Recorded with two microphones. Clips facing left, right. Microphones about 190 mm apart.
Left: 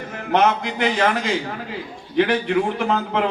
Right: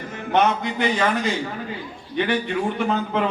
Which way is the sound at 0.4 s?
85° left.